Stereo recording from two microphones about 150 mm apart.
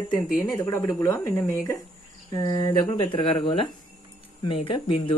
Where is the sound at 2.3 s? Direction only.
30° left (ahead or behind).